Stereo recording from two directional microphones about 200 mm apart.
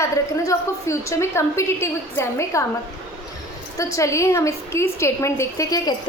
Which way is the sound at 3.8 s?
15° left (ahead or behind).